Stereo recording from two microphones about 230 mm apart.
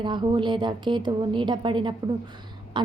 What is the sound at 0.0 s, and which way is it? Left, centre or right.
A woman's voice, centre.